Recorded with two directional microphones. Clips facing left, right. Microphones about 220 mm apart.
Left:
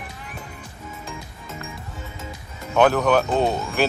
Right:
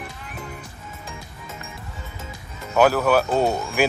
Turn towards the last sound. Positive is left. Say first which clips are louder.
# even
turn(degrees=-10)  # may be behind; listen again after turning